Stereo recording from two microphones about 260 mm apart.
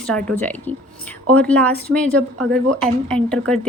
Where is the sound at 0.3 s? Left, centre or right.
Centre.